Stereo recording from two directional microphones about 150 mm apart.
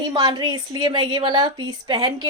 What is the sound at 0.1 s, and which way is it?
A woman's voice, 25° right (ahead or behind).